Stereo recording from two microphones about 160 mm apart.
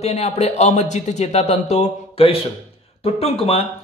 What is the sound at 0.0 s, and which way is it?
Speech, 40° left (ahead or behind).